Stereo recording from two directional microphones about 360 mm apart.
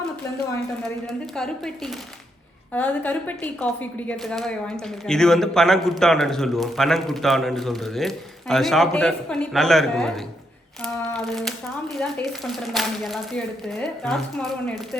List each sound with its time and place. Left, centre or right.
0.8 s a woman's voice: centre